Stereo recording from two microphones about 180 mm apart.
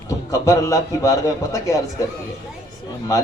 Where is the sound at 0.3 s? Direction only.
15° left (ahead or behind).